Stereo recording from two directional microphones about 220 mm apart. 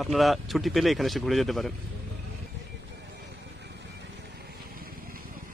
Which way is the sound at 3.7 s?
50° right (ahead or behind).